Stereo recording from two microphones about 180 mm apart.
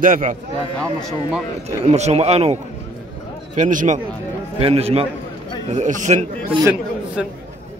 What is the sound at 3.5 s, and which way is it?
A man's voice, 45° right (ahead or behind).